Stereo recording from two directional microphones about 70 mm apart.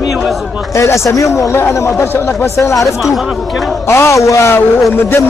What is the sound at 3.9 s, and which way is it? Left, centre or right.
Speech, left.